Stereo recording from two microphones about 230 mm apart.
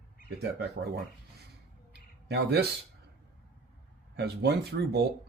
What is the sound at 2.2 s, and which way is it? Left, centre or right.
Speech, right.